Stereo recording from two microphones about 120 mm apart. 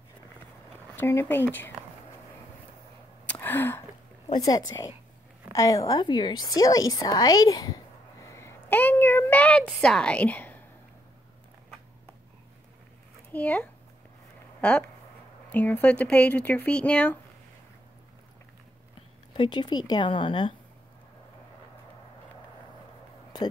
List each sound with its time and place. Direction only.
0.9 s speech: 20° left (ahead or behind)
3.3 s a sound: 15° left (ahead or behind)
4.3 s a woman's voice: 30° left (ahead or behind)
8.4 s a sound: 20° left (ahead or behind)
13.3 s speech: 15° left (ahead or behind)
19.3 s speech: 40° left (ahead or behind)